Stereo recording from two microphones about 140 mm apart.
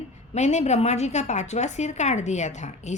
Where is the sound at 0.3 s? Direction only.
55° left (ahead or behind).